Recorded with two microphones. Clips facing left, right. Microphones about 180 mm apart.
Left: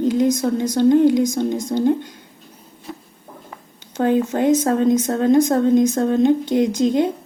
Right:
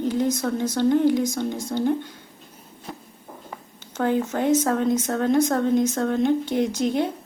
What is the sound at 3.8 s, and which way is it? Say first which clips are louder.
A woman's voice: left 5 dB; 15° left (ahead or behind).